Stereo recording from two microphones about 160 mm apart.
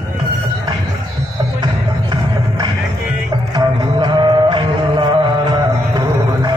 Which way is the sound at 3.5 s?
30° right (ahead or behind).